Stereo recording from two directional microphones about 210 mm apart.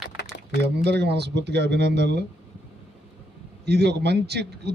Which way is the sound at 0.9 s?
50° right (ahead or behind).